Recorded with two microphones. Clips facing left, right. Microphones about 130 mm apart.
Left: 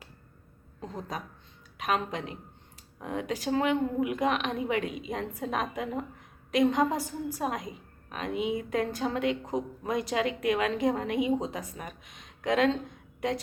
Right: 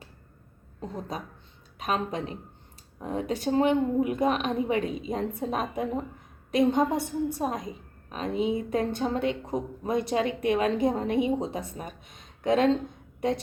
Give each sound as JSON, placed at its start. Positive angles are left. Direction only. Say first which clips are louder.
{"t": 0.8, "sound": "a woman's voice", "louder": "right 3 dB", "side_deg": -5}
{"t": 1.8, "sound": "a woman's voice", "louder": "right 1 dB", "side_deg": -30}